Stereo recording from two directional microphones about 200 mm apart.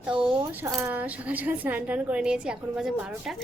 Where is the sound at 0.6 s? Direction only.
10° right (ahead or behind).